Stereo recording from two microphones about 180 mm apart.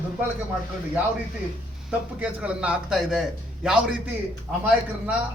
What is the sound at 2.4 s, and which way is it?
Speech, 5° right (ahead or behind).